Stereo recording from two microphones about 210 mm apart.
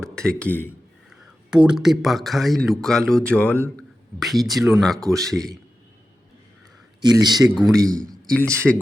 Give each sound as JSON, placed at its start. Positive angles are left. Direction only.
{"t": 0.0, "sound": "speech", "side_deg": 5}
{"t": 1.1, "sound": "speech", "side_deg": -5}
{"t": 7.0, "sound": "a man's voice", "side_deg": -20}
{"t": 7.9, "sound": "speech", "side_deg": 5}